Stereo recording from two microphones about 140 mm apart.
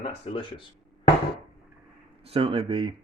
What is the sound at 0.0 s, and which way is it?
Speech, 40° left (ahead or behind).